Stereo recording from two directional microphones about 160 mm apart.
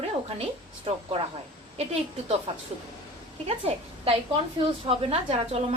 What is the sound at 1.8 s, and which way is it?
Speech, 40° right (ahead or behind).